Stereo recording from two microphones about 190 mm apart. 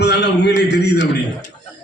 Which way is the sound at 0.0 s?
60° left (ahead or behind).